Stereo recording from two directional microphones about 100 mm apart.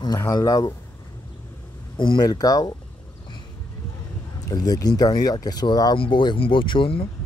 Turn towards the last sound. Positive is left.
turn(degrees=65)  # may be behind; listen again after turning